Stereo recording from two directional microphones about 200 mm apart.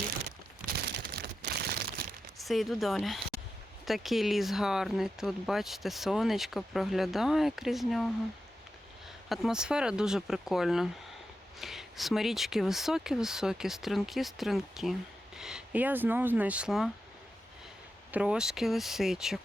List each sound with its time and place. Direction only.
0.3 s a sound: 55° right (ahead or behind)
2.4 s speech: centre (ahead or behind)
9.3 s speech: centre (ahead or behind)
18.1 s speech: 5° right (ahead or behind)